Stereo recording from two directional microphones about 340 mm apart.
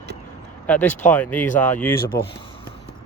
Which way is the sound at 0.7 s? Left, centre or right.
Centre.